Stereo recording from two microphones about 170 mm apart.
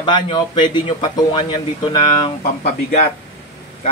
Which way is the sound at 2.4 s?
40° left (ahead or behind).